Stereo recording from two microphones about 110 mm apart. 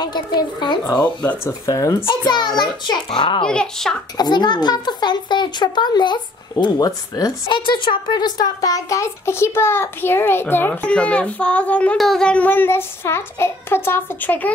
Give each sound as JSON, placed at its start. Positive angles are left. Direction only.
{"t": 0.0, "sound": "speech", "side_deg": 40}
{"t": 1.0, "sound": "a child's voice", "side_deg": 15}
{"t": 1.7, "sound": "speech", "side_deg": 30}
{"t": 2.0, "sound": "speech", "side_deg": 40}
{"t": 3.4, "sound": "a child's voice", "side_deg": 10}
{"t": 4.2, "sound": "speech", "side_deg": 40}
{"t": 7.5, "sound": "a child's voice", "side_deg": 45}